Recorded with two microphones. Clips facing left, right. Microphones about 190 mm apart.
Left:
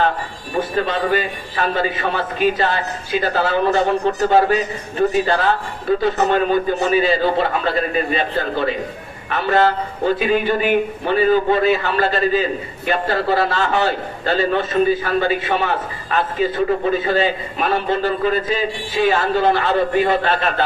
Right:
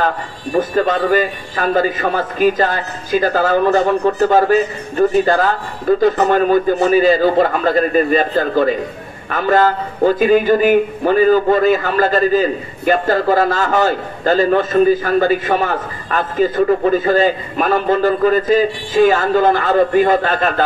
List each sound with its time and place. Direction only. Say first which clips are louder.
0.0 s a man's voice: right 1 dB; 45° right (ahead or behind)